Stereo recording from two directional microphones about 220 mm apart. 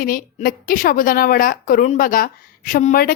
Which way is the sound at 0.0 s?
40° left (ahead or behind).